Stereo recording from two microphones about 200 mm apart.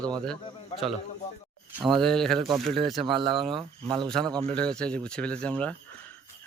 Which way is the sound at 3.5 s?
25° right (ahead or behind).